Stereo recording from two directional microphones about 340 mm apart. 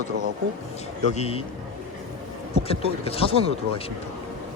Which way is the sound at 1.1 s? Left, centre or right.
Centre.